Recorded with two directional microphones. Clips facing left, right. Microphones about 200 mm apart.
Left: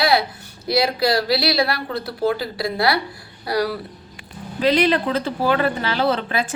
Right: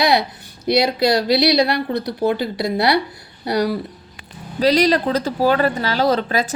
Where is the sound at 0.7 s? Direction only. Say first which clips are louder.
Right 3 dB; 20° right (ahead or behind).